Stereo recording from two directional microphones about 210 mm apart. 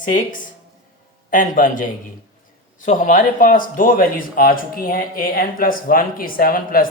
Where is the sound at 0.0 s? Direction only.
40° left (ahead or behind).